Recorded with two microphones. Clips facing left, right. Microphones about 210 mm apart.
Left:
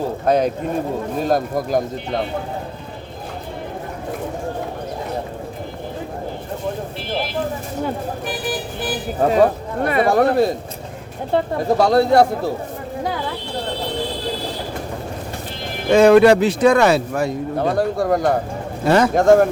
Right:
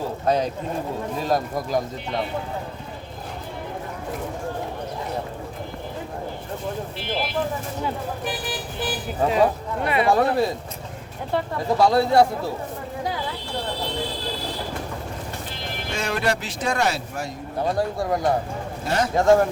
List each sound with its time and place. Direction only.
0.3 s speech: 60° left (ahead or behind)
9.2 s speech: 45° left (ahead or behind)
11.3 s speech: 25° left (ahead or behind)
11.8 s speech: 70° left (ahead or behind)
15.9 s speech: 60° left (ahead or behind)